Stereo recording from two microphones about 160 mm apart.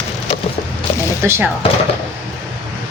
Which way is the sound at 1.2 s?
15° right (ahead or behind).